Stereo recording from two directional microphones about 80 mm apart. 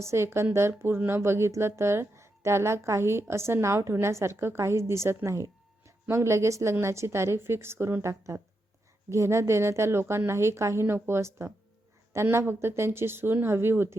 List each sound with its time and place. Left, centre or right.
0.0 s speech: right